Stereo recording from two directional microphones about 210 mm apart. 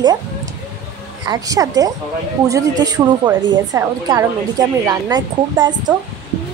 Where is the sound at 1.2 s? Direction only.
15° right (ahead or behind).